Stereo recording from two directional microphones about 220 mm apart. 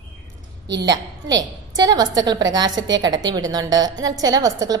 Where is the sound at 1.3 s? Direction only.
15° right (ahead or behind).